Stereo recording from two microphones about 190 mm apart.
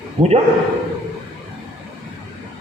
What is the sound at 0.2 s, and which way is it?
Speech, 30° right (ahead or behind).